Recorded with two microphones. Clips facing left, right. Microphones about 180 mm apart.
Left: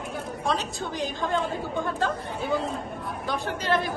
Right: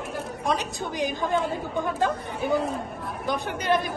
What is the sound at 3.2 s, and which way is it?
Speech, 15° right (ahead or behind).